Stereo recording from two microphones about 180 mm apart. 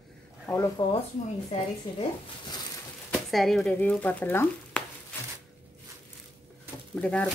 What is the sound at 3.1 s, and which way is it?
Speech, centre (ahead or behind).